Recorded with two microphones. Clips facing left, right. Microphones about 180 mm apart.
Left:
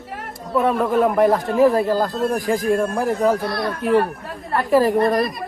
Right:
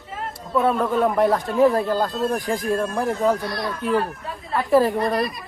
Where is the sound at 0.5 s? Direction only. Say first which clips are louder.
Left 2 dB; centre (ahead or behind).